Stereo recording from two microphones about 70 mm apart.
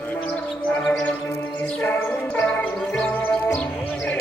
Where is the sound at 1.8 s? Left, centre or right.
Left.